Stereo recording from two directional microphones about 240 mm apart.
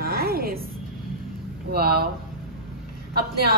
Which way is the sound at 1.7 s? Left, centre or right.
Right.